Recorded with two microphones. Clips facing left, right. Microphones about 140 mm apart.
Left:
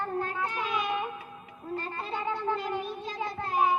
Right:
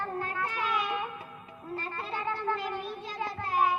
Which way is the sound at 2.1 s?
15° left (ahead or behind).